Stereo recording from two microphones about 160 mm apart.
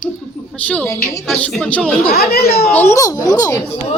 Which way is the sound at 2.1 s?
80° left.